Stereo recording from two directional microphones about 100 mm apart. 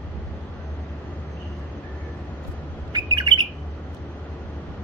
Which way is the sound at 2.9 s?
50° right (ahead or behind).